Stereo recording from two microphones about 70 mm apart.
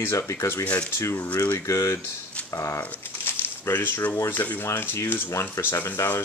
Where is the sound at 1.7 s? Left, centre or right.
Left.